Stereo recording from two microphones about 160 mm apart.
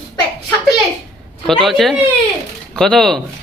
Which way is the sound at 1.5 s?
Centre (ahead or behind).